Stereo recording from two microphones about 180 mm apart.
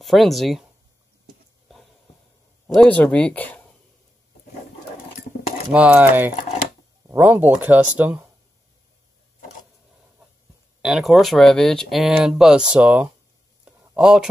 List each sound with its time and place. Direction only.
0.0 s speech: centre (ahead or behind)
2.6 s speech: 5° left (ahead or behind)
5.7 s speech: 10° right (ahead or behind)
10.8 s speech: centre (ahead or behind)
13.7 s a sound: 5° right (ahead or behind)